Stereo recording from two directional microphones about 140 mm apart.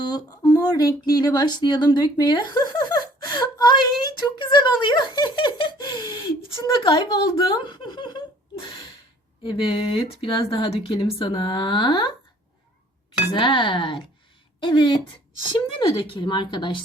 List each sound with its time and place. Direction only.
0.0 s speech: 25° left (ahead or behind)
9.4 s speech: 35° left (ahead or behind)
13.3 s speech: 35° left (ahead or behind)